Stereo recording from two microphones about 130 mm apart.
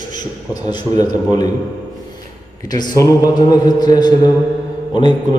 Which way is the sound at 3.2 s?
30° left (ahead or behind).